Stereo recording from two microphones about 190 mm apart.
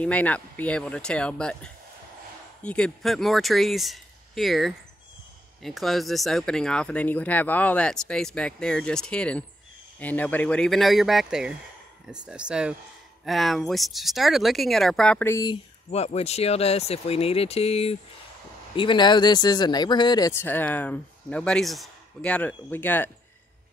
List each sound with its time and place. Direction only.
0.0 s speech: 5° left (ahead or behind)